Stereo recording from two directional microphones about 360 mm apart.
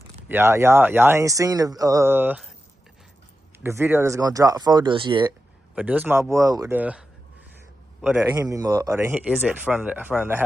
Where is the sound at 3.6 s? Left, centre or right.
Centre.